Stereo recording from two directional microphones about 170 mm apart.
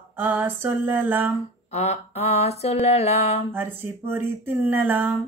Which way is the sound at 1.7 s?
40° left (ahead or behind).